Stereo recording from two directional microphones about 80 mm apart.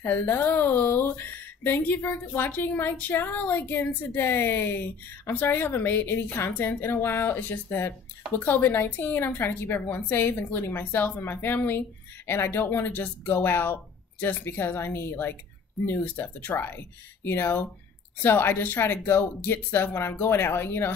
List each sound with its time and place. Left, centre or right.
0.0 s a woman's voice: left